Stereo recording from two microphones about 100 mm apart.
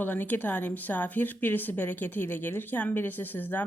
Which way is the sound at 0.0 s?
20° left (ahead or behind).